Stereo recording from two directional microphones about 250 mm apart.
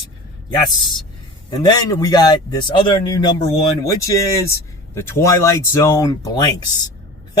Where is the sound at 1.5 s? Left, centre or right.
Centre.